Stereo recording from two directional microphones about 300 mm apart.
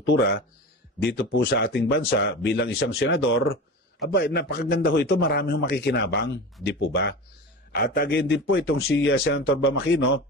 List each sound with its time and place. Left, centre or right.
0.0 s a man's voice: left